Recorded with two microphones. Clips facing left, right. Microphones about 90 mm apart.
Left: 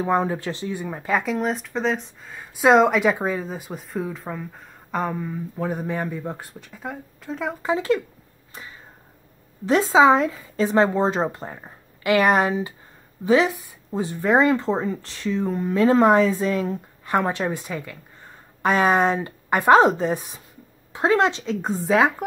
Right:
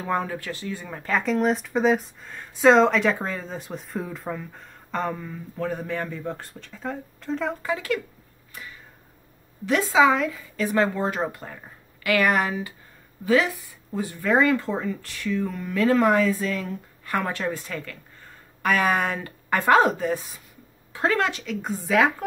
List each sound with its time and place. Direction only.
0.0 s speech: 20° left (ahead or behind); by 7.5 s 5° left (ahead or behind)
7.6 s speech: 25° left (ahead or behind)
9.7 s speech: 30° left (ahead or behind)